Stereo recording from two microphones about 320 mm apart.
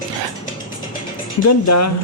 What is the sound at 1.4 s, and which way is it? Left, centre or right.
Speech, left.